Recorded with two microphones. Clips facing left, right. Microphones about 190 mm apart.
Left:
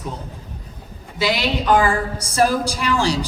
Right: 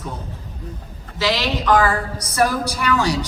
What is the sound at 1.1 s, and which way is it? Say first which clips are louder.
Speech: even; 10° left (ahead or behind).